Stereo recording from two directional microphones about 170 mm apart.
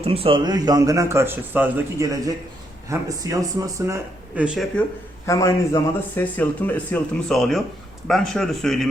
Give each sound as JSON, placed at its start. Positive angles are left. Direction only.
{"t": 0.0, "sound": "a man's voice", "side_deg": -35}
{"t": 4.8, "sound": "a man's voice", "side_deg": 5}
{"t": 5.2, "sound": "a man's voice", "side_deg": 15}